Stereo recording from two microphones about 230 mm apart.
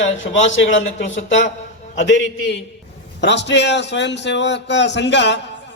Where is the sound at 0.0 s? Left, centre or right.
Left.